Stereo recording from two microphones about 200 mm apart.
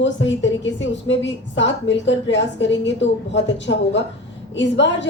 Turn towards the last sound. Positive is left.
turn(degrees=65)  # may be behind; listen again after turning